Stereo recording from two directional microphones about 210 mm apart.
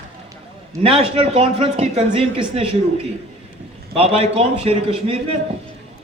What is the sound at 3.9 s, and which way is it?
A man's voice, 30° right (ahead or behind).